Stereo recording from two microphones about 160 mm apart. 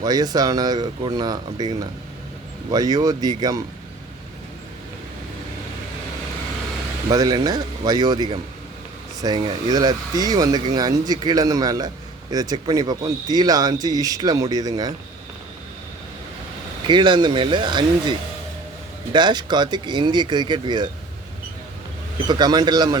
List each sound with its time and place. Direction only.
0.0 s speech: 25° right (ahead or behind)
7.1 s speech: 25° right (ahead or behind)
16.8 s speech: 30° right (ahead or behind)
19.1 s speech: 30° right (ahead or behind)
22.3 s speech: 25° right (ahead or behind)